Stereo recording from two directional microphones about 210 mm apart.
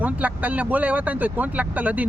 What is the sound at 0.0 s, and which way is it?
Speech, 5° right (ahead or behind).